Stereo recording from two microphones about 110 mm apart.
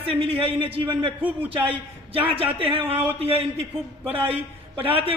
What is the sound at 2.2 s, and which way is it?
A man's voice, 55° right (ahead or behind).